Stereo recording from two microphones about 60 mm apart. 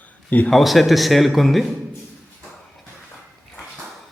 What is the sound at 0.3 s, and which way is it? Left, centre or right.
Speech, left.